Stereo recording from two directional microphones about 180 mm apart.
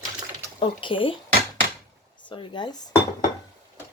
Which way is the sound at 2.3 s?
25° left (ahead or behind).